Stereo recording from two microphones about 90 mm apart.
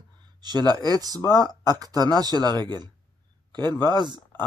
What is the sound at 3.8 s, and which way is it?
Speech, 55° right (ahead or behind).